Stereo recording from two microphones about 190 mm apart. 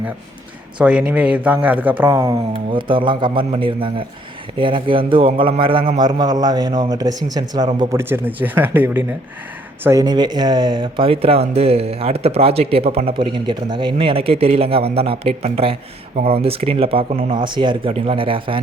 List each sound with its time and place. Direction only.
0.8 s speech: 5° right (ahead or behind)
2.7 s speech: 25° right (ahead or behind)